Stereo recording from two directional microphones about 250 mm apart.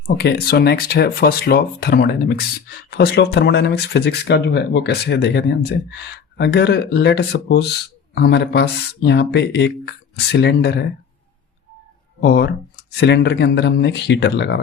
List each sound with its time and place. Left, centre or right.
0.2 s speech: left
12.2 s speech: left